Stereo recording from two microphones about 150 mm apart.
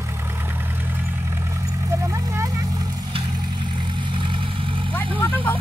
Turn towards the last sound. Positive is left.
turn(degrees=15)  # may be behind; listen again after turning